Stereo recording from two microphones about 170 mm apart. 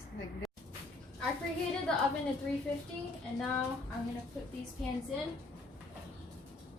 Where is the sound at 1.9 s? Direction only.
5° left (ahead or behind).